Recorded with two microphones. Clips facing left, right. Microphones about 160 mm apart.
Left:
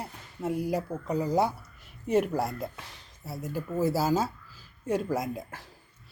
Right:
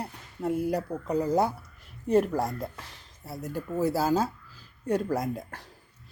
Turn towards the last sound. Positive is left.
turn(degrees=0)  # may be behind; listen again after turning